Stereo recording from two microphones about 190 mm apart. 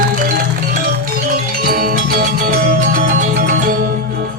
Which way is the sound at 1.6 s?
50° right (ahead or behind).